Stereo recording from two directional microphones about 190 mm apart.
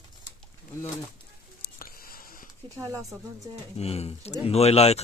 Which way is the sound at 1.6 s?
50° left (ahead or behind).